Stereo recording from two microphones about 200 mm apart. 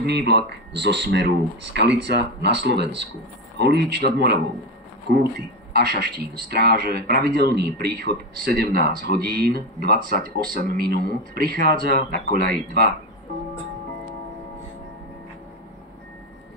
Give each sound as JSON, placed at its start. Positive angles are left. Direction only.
{"t": 0.0, "sound": "speech", "side_deg": -55}
{"t": 5.7, "sound": "speech", "side_deg": -55}